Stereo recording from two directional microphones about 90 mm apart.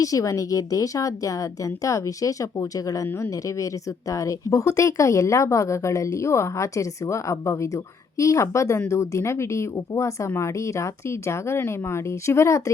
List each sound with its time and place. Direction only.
0.0 s speech: 40° left (ahead or behind)